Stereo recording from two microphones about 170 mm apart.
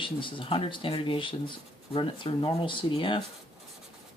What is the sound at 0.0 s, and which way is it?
Speech, 30° left (ahead or behind).